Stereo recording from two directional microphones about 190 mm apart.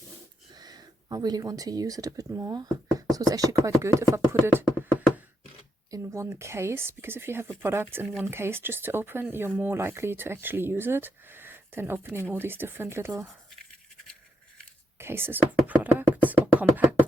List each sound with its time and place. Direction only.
0.5 s speech: 20° right (ahead or behind)
5.9 s speech: 15° right (ahead or behind)
14.9 s beatboxing: 10° right (ahead or behind)